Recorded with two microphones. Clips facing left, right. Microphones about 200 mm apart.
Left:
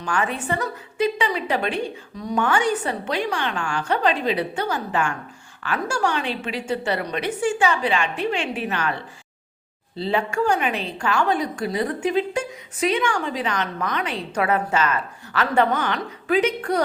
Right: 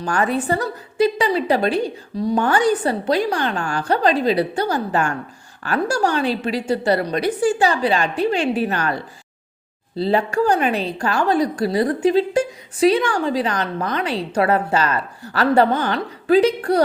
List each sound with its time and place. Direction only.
0.0 s a woman's voice: 40° right (ahead or behind)